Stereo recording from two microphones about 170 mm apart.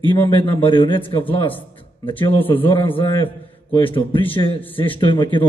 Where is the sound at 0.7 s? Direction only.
30° left (ahead or behind).